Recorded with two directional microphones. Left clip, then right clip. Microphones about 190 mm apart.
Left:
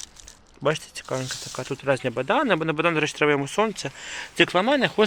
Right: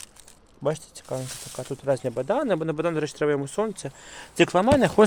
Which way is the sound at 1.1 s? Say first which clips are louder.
Left 3 dB; 20° left (ahead or behind).